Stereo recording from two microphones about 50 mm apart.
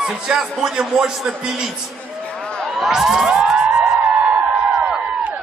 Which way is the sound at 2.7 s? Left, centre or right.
Centre.